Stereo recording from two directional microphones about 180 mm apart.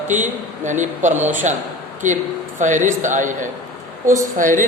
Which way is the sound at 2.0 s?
45° right (ahead or behind).